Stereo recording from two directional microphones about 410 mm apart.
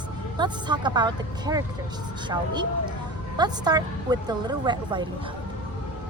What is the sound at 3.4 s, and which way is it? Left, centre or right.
A woman's voice, centre.